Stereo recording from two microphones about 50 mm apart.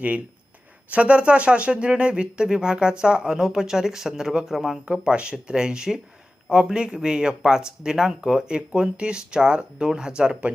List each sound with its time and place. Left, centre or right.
0.9 s speech: right; by 4.8 s centre
4.9 s speech: right